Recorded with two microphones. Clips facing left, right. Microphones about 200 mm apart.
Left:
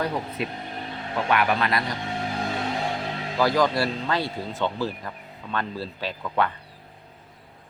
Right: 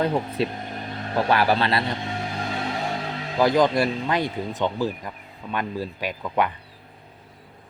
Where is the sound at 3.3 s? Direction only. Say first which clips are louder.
Right 3 dB; 20° right (ahead or behind).